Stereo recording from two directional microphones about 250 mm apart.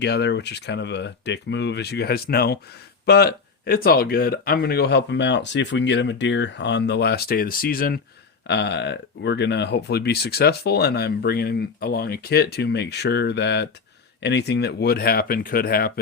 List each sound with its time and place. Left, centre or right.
0.0 s speech: left